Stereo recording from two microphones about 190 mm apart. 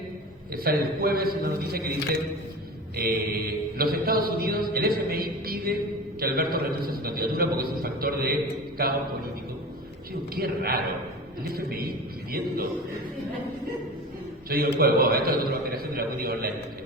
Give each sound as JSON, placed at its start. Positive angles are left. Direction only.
{"t": 0.5, "sound": "mantra", "side_deg": -50}
{"t": 10.3, "sound": "mantra", "side_deg": -50}
{"t": 14.5, "sound": "mantra", "side_deg": -50}